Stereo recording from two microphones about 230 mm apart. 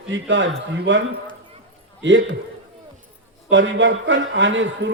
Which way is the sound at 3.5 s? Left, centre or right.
Right.